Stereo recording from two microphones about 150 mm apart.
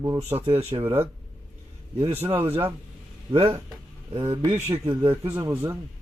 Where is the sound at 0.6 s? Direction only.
45° right (ahead or behind).